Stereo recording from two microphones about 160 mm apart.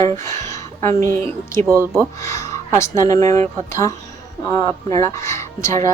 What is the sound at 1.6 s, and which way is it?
Speech, 15° right (ahead or behind).